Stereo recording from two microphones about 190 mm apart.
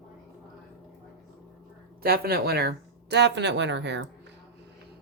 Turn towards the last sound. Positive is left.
turn(degrees=-65)  # may be behind; listen again after turning